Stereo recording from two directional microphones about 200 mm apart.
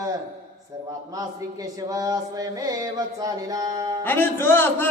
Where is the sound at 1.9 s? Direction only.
15° right (ahead or behind).